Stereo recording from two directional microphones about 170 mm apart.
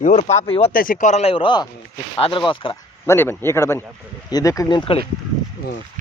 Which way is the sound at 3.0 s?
15° left (ahead or behind).